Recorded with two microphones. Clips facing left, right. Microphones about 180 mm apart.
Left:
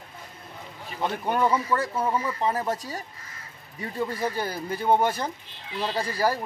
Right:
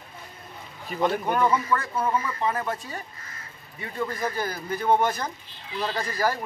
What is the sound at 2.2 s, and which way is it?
Speech, 30° left (ahead or behind).